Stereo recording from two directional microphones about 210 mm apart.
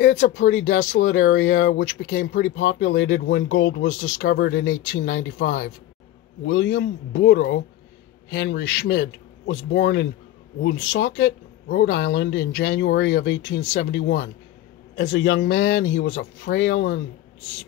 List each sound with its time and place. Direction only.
0.0 s speech: 65° left (ahead or behind)
6.4 s speech: 60° left (ahead or behind)